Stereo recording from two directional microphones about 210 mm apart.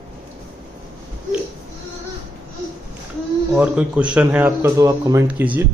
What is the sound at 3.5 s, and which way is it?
Speech, 5° right (ahead or behind).